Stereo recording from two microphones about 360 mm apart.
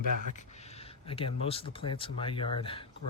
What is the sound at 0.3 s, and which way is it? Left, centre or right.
Speech, centre.